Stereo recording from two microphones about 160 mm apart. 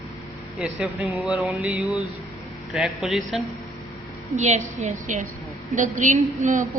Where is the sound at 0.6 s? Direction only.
5° right (ahead or behind).